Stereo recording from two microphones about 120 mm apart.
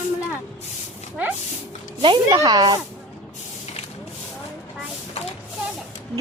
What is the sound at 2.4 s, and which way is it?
Speech, 30° right (ahead or behind).